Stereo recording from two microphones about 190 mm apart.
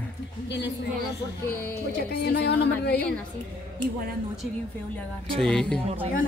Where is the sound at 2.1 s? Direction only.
60° left (ahead or behind).